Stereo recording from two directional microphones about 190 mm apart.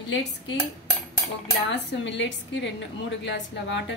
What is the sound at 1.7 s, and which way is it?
A woman's voice, 70° left (ahead or behind).